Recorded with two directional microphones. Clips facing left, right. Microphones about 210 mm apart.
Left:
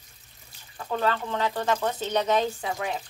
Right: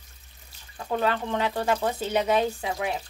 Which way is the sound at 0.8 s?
20° right (ahead or behind).